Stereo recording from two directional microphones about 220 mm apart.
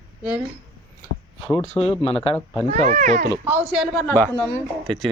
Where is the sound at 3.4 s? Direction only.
10° right (ahead or behind).